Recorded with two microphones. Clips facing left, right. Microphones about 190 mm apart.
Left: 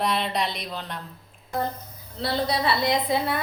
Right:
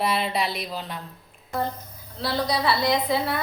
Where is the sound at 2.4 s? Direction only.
25° left (ahead or behind).